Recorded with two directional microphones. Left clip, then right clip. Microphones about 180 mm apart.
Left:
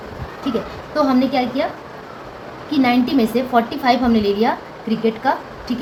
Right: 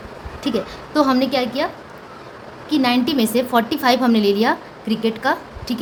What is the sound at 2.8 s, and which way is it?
A woman's voice, 45° right (ahead or behind).